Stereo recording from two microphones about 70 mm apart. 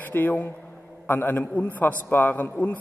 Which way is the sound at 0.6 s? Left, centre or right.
Centre.